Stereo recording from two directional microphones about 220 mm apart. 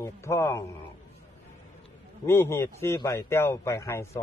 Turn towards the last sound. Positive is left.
turn(degrees=15)  # may be behind; listen again after turning